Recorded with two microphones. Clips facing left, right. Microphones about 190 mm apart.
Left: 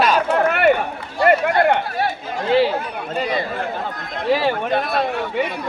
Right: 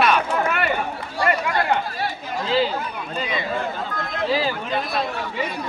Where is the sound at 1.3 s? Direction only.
60° left (ahead or behind); by 3.4 s 45° left (ahead or behind).